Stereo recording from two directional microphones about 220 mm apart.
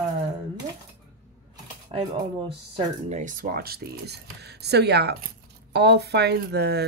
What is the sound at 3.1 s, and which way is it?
Speech, 35° right (ahead or behind).